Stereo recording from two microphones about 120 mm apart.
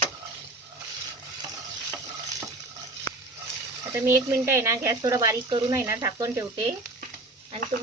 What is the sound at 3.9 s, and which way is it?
Speech, 25° right (ahead or behind).